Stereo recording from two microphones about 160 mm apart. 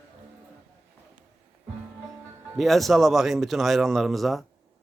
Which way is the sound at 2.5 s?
Centre (ahead or behind).